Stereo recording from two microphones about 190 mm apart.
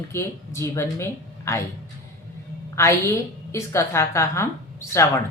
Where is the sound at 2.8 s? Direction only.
15° left (ahead or behind).